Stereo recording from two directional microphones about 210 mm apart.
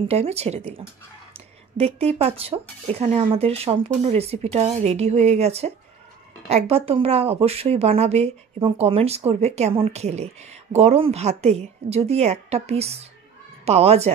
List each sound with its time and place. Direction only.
0.1 s a woman's voice: 30° right (ahead or behind)